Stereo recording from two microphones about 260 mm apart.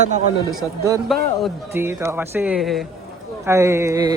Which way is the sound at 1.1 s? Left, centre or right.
Centre.